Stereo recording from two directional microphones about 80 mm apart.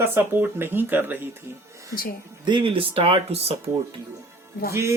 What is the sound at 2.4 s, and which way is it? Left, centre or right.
Speech, right.